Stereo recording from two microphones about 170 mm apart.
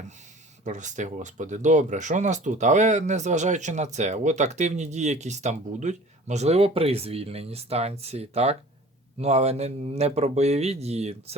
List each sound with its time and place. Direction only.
0.6 s speech: 45° right (ahead or behind)